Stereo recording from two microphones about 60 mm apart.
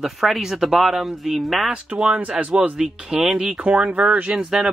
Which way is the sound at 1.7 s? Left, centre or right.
Centre.